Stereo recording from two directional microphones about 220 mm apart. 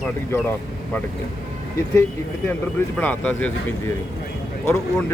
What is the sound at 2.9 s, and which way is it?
Speech, 5° left (ahead or behind).